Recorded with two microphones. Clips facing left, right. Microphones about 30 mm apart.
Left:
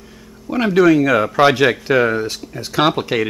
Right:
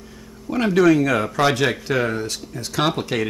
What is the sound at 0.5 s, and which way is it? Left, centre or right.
Speech, centre.